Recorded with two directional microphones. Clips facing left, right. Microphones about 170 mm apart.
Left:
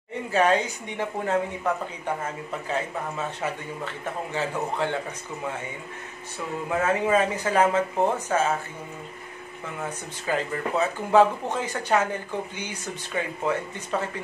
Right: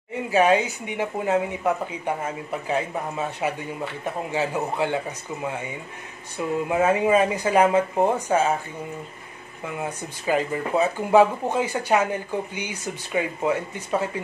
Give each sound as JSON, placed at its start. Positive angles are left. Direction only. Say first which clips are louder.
{"t": 0.3, "sound": "speech", "louder": "right 3 dB", "side_deg": -10}
{"t": 9.8, "sound": "speech", "louder": "right 2 dB", "side_deg": -15}